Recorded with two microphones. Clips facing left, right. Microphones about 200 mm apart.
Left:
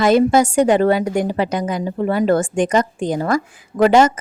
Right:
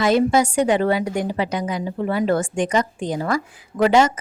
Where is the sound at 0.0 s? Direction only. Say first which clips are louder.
Left 4 dB; 45° left (ahead or behind).